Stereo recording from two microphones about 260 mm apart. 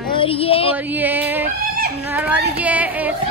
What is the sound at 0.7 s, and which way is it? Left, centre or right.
A child's voice, centre.